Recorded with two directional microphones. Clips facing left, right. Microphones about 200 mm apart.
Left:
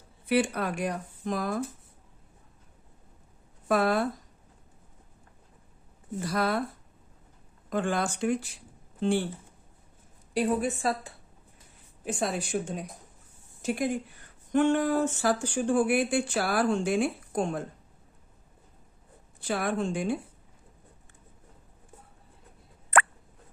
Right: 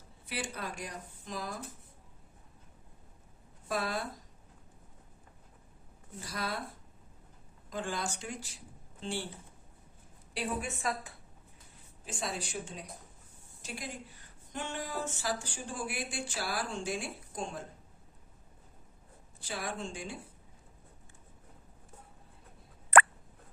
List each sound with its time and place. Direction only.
0.3 s speech: 60° left (ahead or behind)
3.7 s speech: 60° left (ahead or behind)
6.1 s speech: 60° left (ahead or behind)
7.7 s speech: 60° left (ahead or behind)
10.3 s a woman's voice: 35° left (ahead or behind)
12.0 s speech: 55° left (ahead or behind)
19.4 s speech: 60° left (ahead or behind)